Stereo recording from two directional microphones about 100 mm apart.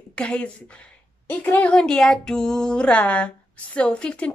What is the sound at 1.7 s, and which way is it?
Speech, 5° left (ahead or behind).